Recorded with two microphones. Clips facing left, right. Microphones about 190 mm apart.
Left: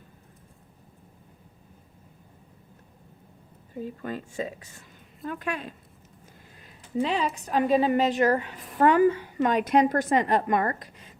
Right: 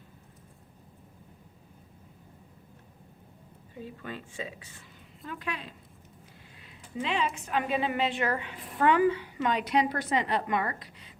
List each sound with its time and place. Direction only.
3.8 s a woman's voice: 45° left (ahead or behind)